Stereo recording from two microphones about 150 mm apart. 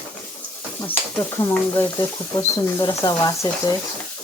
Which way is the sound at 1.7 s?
20° left (ahead or behind).